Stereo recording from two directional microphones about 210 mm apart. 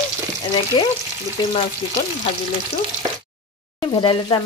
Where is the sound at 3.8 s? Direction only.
25° left (ahead or behind).